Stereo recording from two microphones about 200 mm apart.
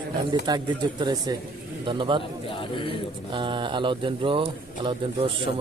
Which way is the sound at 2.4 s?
25° left (ahead or behind).